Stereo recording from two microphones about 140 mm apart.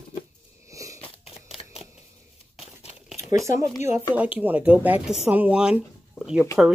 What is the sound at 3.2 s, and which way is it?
Speech, 20° right (ahead or behind).